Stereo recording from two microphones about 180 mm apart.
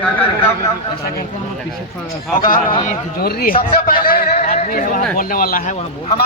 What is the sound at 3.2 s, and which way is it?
A man's voice, 55° left (ahead or behind).